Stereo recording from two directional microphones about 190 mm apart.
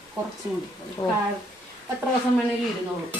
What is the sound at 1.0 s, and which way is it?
Speech, 15° left (ahead or behind).